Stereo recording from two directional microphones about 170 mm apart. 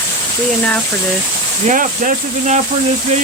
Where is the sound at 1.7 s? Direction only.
50° right (ahead or behind).